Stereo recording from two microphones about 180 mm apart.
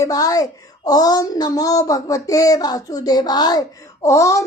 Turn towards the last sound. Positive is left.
turn(degrees=15)  # may be behind; listen again after turning